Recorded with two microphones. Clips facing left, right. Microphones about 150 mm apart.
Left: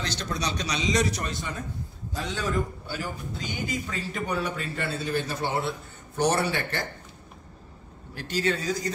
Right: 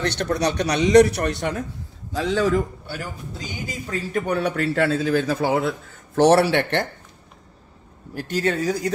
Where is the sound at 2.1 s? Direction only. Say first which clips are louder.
Right 9 dB; 90° right.